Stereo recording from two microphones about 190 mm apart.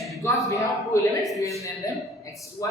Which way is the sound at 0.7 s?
Centre (ahead or behind).